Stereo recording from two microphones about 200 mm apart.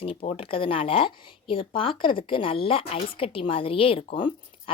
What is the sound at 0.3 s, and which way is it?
Speech, 25° left (ahead or behind).